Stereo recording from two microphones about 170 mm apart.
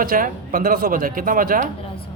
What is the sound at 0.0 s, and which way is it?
Speech, 55° right (ahead or behind).